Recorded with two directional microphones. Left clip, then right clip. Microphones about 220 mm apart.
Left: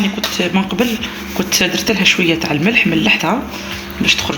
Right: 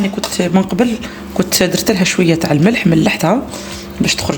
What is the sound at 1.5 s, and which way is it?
Speech, 60° right (ahead or behind).